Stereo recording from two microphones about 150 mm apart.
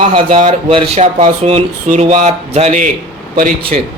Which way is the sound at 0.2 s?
60° right (ahead or behind).